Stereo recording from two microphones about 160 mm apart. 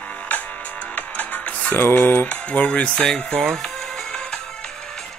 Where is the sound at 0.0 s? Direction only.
10° left (ahead or behind).